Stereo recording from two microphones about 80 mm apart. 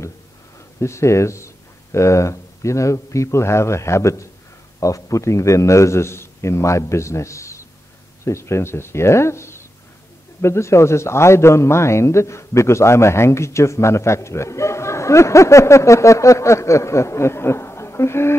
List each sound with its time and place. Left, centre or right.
0.7 s a man's voice: left